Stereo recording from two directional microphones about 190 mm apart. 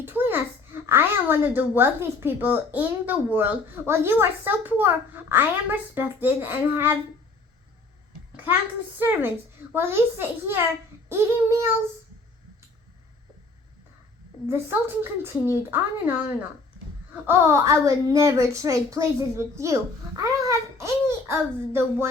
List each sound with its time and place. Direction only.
0.0 s a child's voice: 10° right (ahead or behind)
9.0 s a child's voice: 10° right (ahead or behind)
14.4 s a child's voice: 10° right (ahead or behind)